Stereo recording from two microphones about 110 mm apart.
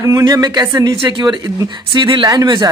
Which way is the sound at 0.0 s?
30° right (ahead or behind).